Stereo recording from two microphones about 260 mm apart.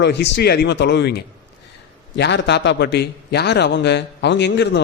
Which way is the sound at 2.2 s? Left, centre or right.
Left.